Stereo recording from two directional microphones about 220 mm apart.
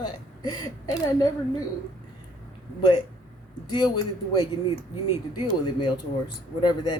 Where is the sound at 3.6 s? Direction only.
20° left (ahead or behind).